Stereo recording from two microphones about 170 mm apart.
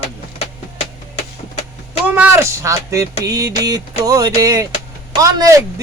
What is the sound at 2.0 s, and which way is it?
Speech, 10° right (ahead or behind).